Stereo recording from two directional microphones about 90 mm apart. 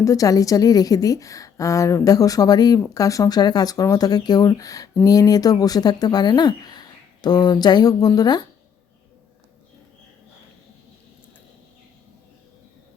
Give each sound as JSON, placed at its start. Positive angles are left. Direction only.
{"t": 0.0, "sound": "a woman's voice", "side_deg": 40}